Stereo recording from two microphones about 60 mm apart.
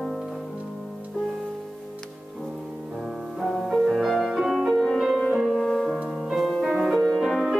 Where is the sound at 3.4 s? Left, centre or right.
Centre.